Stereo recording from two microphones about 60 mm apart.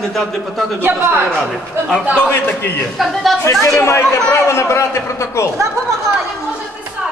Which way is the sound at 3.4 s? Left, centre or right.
Left.